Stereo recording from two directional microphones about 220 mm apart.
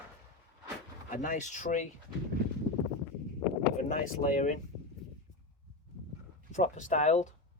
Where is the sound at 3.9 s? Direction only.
35° left (ahead or behind).